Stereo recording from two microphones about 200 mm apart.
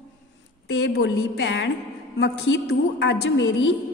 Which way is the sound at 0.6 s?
65° left (ahead or behind).